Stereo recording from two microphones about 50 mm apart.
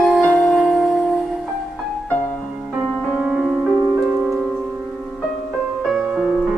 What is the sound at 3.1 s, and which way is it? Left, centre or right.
Music, right.